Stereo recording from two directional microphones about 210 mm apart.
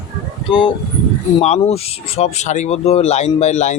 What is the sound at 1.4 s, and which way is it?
Speech, 30° left (ahead or behind).